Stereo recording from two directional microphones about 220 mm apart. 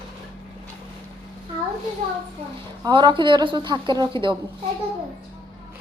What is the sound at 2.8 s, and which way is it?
Speech, 20° right (ahead or behind).